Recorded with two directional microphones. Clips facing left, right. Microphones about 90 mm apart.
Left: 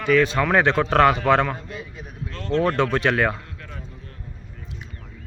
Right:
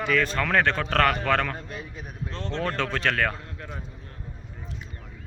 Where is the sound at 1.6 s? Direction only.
30° right (ahead or behind).